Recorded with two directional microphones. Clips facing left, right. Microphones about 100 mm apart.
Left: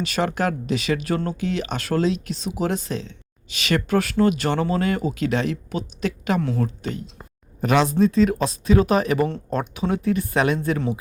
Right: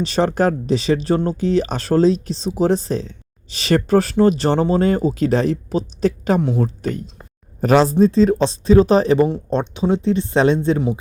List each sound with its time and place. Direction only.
0.0 s speech: 30° right (ahead or behind)
6.4 s speech: 20° right (ahead or behind)
7.6 s speech: 35° right (ahead or behind); by 10.9 s 20° right (ahead or behind)